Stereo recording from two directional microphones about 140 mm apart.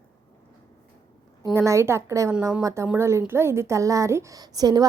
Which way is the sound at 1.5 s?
20° right (ahead or behind).